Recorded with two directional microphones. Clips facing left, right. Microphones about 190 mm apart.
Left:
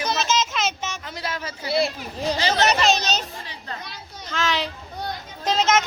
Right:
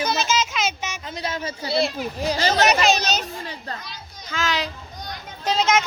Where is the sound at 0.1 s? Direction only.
5° right (ahead or behind); by 1.8 s 30° right (ahead or behind).